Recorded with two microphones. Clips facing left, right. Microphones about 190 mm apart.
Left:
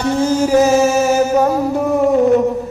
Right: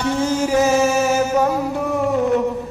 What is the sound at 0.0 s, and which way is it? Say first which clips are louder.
Music: left 4 dB; 40° left (ahead or behind).